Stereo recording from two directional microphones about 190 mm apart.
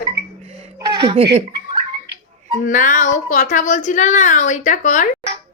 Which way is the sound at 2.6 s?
45° left (ahead or behind).